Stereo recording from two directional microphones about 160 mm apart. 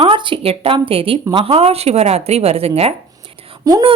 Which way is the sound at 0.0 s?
30° right (ahead or behind).